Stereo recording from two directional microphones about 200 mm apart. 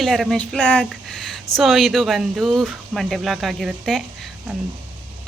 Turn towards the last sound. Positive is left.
turn(degrees=0)  # may be behind; listen again after turning